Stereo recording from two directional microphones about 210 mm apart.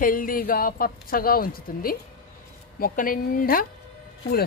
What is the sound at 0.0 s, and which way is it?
Speech, 40° left (ahead or behind).